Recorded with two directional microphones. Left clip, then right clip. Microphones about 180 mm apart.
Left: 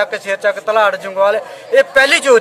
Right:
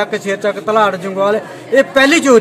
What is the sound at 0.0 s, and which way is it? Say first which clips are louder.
A man's voice: left 1 dB; 25° left (ahead or behind).